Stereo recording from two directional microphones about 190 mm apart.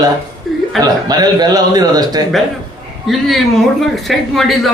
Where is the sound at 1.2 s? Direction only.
20° right (ahead or behind).